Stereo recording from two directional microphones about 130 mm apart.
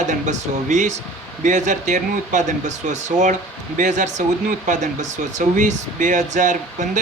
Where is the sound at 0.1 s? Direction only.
70° right (ahead or behind).